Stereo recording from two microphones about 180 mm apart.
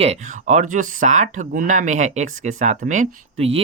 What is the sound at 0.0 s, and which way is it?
Speech, 40° right (ahead or behind).